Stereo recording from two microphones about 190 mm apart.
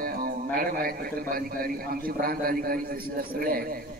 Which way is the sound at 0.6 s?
50° right (ahead or behind).